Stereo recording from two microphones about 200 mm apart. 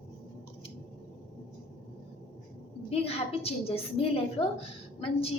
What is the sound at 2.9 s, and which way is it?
A woman's voice, 30° left (ahead or behind).